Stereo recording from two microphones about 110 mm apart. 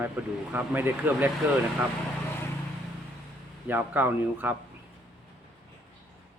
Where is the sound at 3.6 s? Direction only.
15° right (ahead or behind).